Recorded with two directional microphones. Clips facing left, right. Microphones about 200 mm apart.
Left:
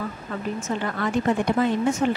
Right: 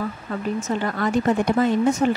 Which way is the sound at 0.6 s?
40° right (ahead or behind).